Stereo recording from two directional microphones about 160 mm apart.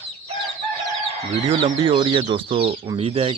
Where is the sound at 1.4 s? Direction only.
35° right (ahead or behind).